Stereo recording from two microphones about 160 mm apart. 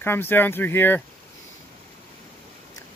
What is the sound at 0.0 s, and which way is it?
Speech, 15° left (ahead or behind).